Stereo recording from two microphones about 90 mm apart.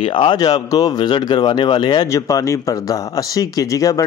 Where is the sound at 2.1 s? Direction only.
40° left (ahead or behind).